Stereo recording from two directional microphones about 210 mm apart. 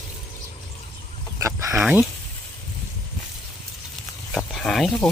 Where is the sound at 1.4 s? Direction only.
15° right (ahead or behind).